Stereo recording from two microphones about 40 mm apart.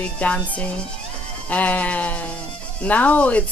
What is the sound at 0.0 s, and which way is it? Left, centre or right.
Speech, left.